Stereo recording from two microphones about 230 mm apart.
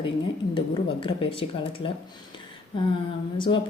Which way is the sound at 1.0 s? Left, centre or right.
Left.